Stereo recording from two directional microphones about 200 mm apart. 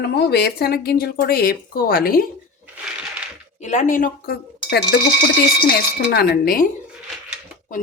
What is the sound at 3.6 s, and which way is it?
Speech, 35° left (ahead or behind).